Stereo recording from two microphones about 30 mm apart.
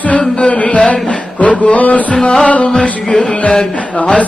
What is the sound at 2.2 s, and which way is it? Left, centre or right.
Music, left.